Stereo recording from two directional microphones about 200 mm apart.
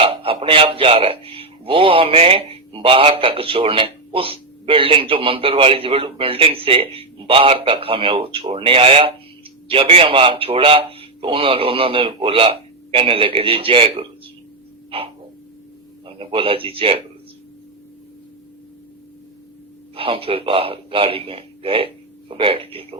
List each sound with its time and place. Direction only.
0.0 s a man's voice: 30° right (ahead or behind)
14.8 s a sound: 30° right (ahead or behind)
16.0 s a man's voice: 30° right (ahead or behind)
20.0 s a man's voice: 30° right (ahead or behind)